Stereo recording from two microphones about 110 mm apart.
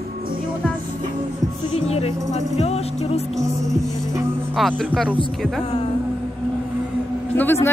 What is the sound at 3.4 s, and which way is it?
Music, 30° right (ahead or behind).